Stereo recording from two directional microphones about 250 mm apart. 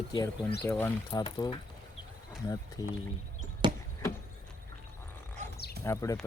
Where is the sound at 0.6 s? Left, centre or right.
Centre.